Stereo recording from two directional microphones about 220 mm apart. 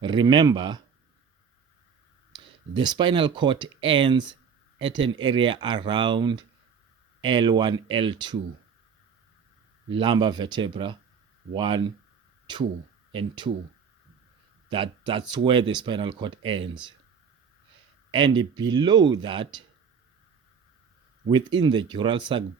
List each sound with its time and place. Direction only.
0.0 s speech: 20° right (ahead or behind)
2.3 s speech: 20° right (ahead or behind)
9.9 s speech: 20° right (ahead or behind)
13.1 s speech: 20° right (ahead or behind)
14.7 s speech: 20° right (ahead or behind)
18.1 s speech: 20° right (ahead or behind)
21.2 s speech: 20° right (ahead or behind)